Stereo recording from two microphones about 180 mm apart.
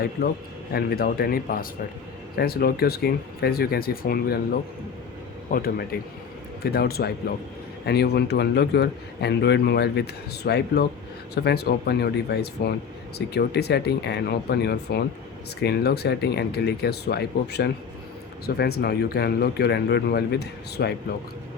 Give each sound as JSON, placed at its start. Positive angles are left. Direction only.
{"t": 0.2, "sound": "speech", "side_deg": 60}
{"t": 5.5, "sound": "speech", "side_deg": 55}